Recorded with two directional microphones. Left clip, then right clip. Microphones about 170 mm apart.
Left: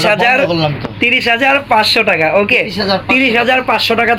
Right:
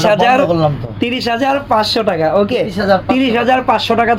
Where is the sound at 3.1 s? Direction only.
45° right (ahead or behind).